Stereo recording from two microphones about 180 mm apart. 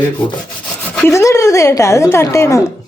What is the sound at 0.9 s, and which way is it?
A woman's voice, 10° left (ahead or behind).